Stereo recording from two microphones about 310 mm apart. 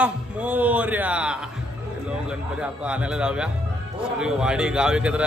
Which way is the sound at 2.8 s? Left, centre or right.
Centre.